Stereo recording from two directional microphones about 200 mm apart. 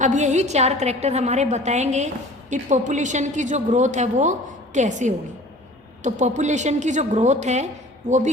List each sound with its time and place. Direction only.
0.0 s a woman's voice: 35° right (ahead or behind)